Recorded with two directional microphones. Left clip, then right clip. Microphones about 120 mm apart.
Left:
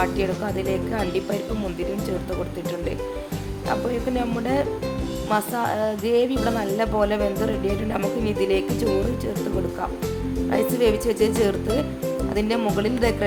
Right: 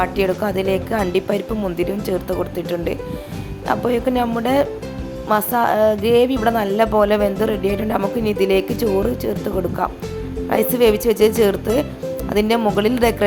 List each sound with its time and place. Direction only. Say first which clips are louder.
0.0 s speech: right 5 dB; 45° right (ahead or behind)
3.7 s speech: right 6 dB; 45° right (ahead or behind)
5.3 s speech: right 7 dB; 45° right (ahead or behind)
10.5 s speech: right 5 dB; 45° right (ahead or behind)